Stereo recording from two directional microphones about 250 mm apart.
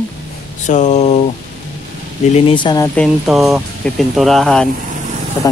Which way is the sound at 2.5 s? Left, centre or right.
Centre.